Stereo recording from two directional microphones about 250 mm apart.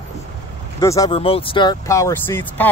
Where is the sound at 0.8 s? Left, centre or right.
Centre.